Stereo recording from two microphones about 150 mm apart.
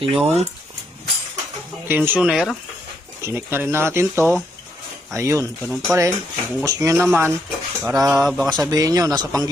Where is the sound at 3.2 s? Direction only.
15° right (ahead or behind).